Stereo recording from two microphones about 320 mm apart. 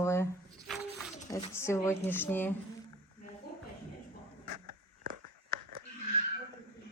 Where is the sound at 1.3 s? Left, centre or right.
Centre.